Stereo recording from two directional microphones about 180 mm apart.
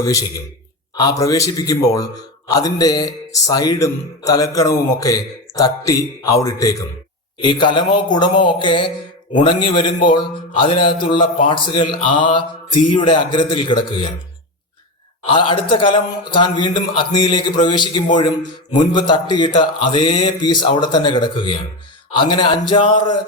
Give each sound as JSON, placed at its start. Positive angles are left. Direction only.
{"t": 0.0, "sound": "a man's voice", "side_deg": 20}
{"t": 15.2, "sound": "a man's voice", "side_deg": 30}